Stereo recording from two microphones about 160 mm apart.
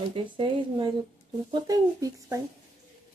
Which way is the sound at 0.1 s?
30° right (ahead or behind).